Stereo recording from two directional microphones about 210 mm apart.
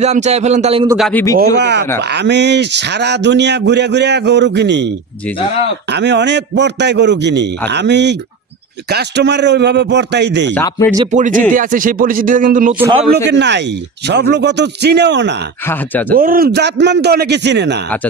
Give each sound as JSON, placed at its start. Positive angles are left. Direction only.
{"t": 0.0, "sound": "a man's voice", "side_deg": -30}
{"t": 0.9, "sound": "a man's voice", "side_deg": 0}
{"t": 1.4, "sound": "a man's voice", "side_deg": -55}
{"t": 10.5, "sound": "speech", "side_deg": 10}
{"t": 11.1, "sound": "a man's voice", "side_deg": -35}
{"t": 13.3, "sound": "speech", "side_deg": -55}
{"t": 15.6, "sound": "speech", "side_deg": 10}
{"t": 16.2, "sound": "a man's voice", "side_deg": -45}